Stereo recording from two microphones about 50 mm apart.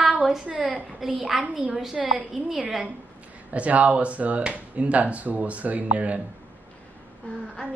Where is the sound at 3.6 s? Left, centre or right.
Right.